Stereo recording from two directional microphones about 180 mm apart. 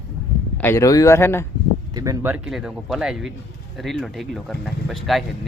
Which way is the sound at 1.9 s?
20° right (ahead or behind).